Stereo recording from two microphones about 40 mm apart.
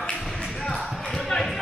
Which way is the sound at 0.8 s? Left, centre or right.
Centre.